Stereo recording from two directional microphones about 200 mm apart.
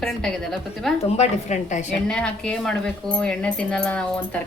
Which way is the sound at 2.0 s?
5° left (ahead or behind).